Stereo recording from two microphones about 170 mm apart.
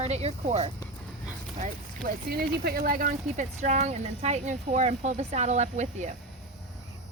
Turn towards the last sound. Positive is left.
turn(degrees=-45)  # may be behind; listen again after turning